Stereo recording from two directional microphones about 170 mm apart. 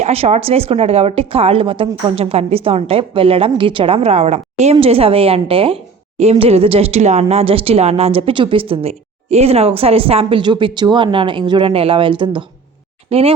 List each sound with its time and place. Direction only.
0.0 s a woman's voice: 40° right (ahead or behind)